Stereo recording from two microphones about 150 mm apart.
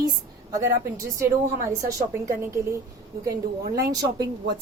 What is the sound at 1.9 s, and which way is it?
Speech, 20° right (ahead or behind).